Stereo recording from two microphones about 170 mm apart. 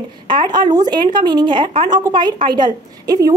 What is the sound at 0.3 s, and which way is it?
A woman's voice, 25° right (ahead or behind).